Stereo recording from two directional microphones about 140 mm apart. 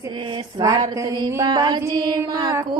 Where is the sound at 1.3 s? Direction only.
25° right (ahead or behind).